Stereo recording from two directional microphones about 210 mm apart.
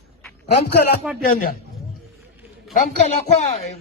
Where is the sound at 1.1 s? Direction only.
5° right (ahead or behind).